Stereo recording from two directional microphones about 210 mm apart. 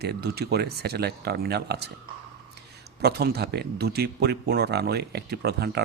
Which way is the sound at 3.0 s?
50° right (ahead or behind).